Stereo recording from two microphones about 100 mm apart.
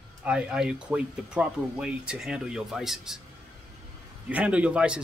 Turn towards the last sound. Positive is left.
turn(degrees=-10)  # may be behind; listen again after turning